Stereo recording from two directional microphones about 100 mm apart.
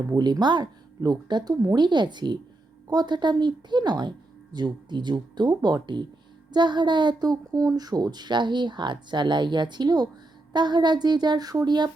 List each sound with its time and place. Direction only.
0.2 s speech: 45° right (ahead or behind)